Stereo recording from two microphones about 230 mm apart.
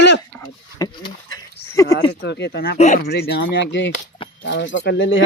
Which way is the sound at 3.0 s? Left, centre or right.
Left.